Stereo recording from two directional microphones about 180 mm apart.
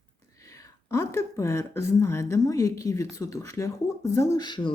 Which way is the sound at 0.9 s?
15° left (ahead or behind).